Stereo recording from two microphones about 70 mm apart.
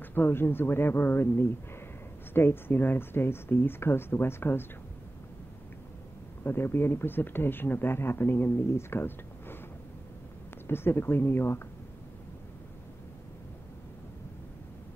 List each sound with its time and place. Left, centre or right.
0.0 s speech: left
6.4 s speech: left
10.7 s speech: left